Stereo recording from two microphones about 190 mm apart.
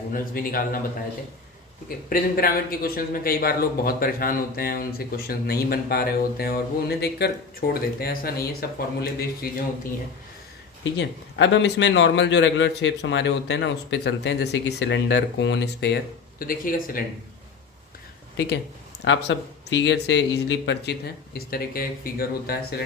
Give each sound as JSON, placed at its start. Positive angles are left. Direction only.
{"t": 0.1, "sound": "speech", "side_deg": 50}
{"t": 2.0, "sound": "speech", "side_deg": 50}
{"t": 10.9, "sound": "a man's voice", "side_deg": 70}
{"t": 16.4, "sound": "speech", "side_deg": 50}
{"t": 18.3, "sound": "speech", "side_deg": 65}